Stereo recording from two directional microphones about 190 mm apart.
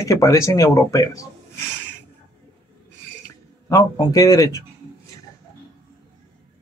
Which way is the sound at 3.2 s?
20° left (ahead or behind).